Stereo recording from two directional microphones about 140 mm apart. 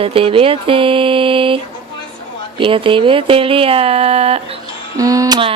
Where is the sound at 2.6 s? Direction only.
40° right (ahead or behind).